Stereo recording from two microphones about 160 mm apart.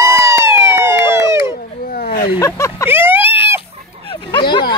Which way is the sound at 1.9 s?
65° left (ahead or behind).